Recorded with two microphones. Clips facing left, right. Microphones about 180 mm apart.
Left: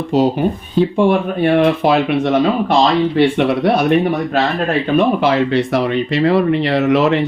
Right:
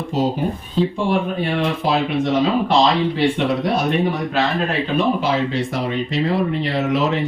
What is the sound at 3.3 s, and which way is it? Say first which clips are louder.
Speech: left 5 dB; 65° left (ahead or behind).